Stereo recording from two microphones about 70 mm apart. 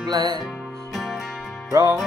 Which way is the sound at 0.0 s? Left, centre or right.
Right.